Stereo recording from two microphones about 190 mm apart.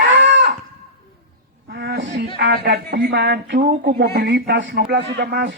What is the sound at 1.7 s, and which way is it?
Music, 60° right (ahead or behind).